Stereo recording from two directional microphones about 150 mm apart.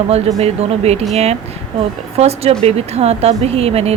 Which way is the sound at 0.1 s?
45° right (ahead or behind).